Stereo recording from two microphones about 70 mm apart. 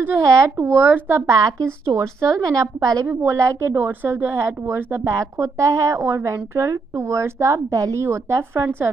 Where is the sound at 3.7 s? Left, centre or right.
Right.